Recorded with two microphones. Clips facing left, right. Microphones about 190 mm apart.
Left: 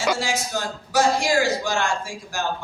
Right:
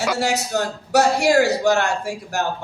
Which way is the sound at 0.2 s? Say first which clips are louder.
Right 5 dB; 65° right (ahead or behind).